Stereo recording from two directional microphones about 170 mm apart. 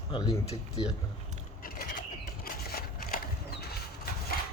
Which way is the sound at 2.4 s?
60° left (ahead or behind).